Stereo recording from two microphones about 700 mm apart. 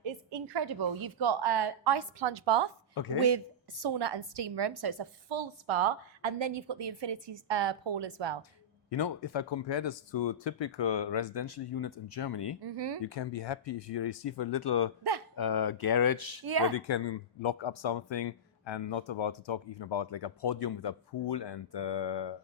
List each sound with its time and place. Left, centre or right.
0.0 s a woman's voice: right
3.8 s a woman's voice: right
8.9 s speech: left
12.6 s a woman's voice: right
13.4 s speech: left
16.5 s a woman's voice: right
16.7 s speech: left